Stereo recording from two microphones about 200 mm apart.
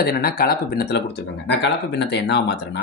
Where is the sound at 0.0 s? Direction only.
50° left (ahead or behind).